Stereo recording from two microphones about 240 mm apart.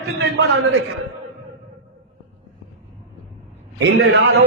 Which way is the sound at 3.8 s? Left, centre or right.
Right.